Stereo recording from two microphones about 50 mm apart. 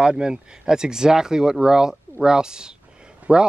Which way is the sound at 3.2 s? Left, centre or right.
Right.